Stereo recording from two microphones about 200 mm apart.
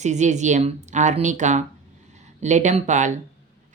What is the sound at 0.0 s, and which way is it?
Speech, 35° right (ahead or behind).